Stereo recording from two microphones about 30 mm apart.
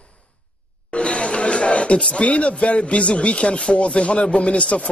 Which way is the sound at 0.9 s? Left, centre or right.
Left.